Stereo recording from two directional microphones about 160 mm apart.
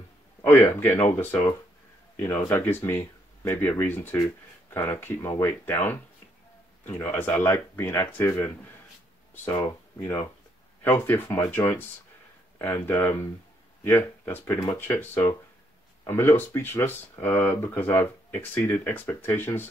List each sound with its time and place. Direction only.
0.5 s speech: 15° left (ahead or behind)
2.5 s speech: 15° left (ahead or behind)